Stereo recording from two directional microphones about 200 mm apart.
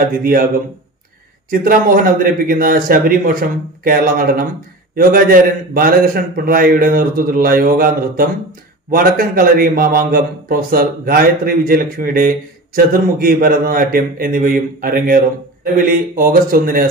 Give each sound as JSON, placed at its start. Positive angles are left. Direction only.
{"t": 0.2, "sound": "a man's voice", "side_deg": -45}
{"t": 1.5, "sound": "a man's voice", "side_deg": -45}